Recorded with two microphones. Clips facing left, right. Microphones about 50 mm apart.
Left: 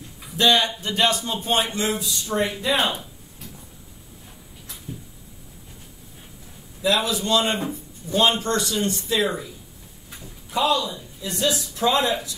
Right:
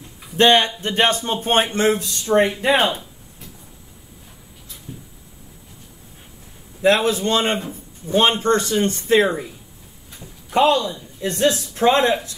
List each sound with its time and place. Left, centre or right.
0.4 s a man's voice: right
6.8 s a man's voice: right
10.5 s a man's voice: right